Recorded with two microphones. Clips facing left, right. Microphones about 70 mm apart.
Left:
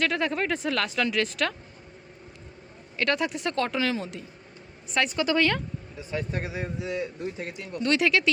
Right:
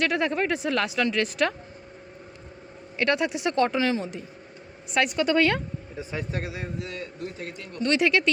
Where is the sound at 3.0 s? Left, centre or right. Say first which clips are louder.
Right 2 dB; centre.